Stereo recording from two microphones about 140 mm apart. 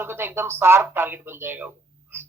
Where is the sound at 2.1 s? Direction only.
15° right (ahead or behind).